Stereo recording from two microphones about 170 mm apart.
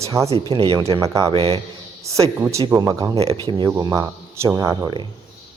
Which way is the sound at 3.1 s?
35° right (ahead or behind).